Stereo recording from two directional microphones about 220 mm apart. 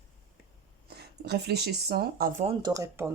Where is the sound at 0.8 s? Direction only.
45° right (ahead or behind).